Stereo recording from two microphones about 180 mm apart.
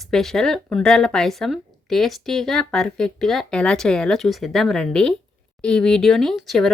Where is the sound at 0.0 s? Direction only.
Centre (ahead or behind).